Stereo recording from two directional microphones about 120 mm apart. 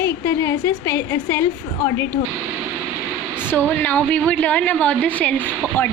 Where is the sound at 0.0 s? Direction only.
20° left (ahead or behind).